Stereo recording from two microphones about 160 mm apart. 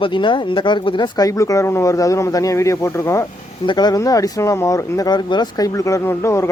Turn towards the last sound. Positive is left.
turn(degrees=15)  # may be behind; listen again after turning